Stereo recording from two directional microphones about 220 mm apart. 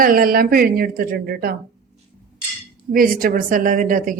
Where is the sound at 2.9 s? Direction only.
40° right (ahead or behind).